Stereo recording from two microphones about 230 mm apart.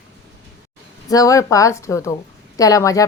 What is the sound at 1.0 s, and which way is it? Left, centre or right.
A woman's voice, centre.